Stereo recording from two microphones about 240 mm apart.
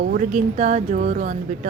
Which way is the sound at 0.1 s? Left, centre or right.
Right.